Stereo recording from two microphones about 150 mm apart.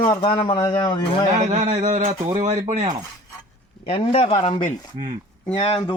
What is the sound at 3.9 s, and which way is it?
A man's voice, 40° left (ahead or behind).